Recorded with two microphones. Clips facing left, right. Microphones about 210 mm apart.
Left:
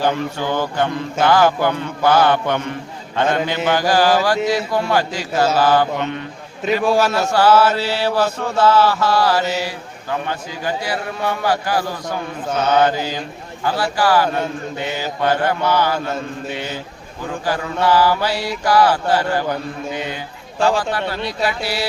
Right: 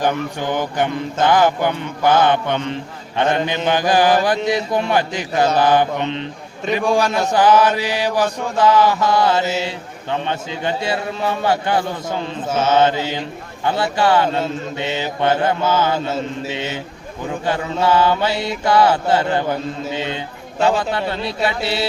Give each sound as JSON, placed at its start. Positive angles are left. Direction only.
{"t": 0.0, "sound": "mantra", "side_deg": -15}
{"t": 6.8, "sound": "a man's voice", "side_deg": 5}
{"t": 7.3, "sound": "mantra", "side_deg": -15}